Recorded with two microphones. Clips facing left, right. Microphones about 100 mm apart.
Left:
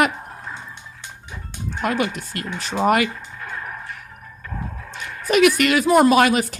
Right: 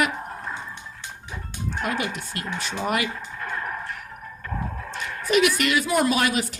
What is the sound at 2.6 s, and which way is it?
Speech, 55° left (ahead or behind).